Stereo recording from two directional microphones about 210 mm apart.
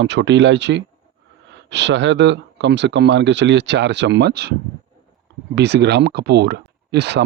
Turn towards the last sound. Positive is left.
turn(degrees=-55)  # may be behind; listen again after turning